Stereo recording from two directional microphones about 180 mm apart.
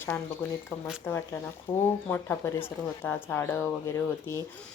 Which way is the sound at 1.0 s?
10° left (ahead or behind).